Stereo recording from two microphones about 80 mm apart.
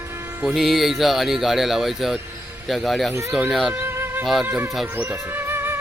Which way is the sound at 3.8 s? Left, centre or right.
Right.